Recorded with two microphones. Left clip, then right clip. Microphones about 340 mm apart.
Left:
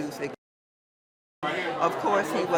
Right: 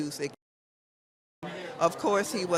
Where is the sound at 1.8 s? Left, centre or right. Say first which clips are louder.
Even; right.